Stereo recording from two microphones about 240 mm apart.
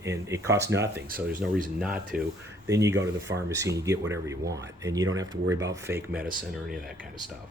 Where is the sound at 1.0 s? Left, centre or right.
Right.